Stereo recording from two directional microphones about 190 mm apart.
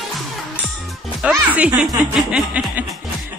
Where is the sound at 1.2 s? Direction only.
5° right (ahead or behind).